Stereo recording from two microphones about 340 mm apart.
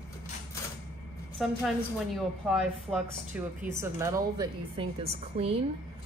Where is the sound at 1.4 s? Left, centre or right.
Centre.